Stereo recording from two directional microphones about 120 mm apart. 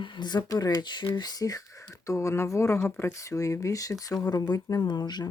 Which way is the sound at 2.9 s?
20° left (ahead or behind).